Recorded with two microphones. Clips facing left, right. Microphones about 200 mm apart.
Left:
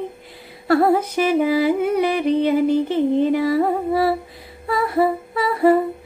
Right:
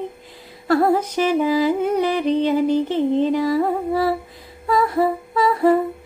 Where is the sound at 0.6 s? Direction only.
60° left (ahead or behind).